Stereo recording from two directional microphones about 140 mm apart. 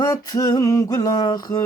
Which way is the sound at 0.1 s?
25° left (ahead or behind).